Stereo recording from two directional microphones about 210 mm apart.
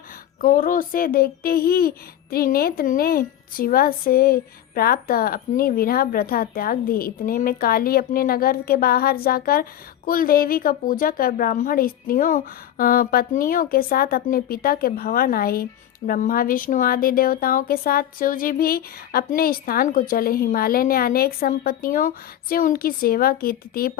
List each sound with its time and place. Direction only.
0.4 s speech: 40° left (ahead or behind)